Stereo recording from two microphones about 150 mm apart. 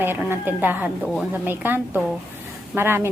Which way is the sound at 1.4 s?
15° right (ahead or behind).